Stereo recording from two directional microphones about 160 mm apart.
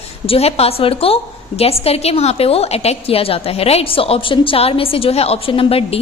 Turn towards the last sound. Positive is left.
turn(degrees=35)  # may be behind; listen again after turning